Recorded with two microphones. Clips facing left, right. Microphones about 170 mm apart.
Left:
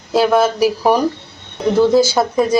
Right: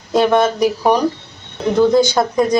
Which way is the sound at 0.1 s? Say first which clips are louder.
Even; 5° left (ahead or behind).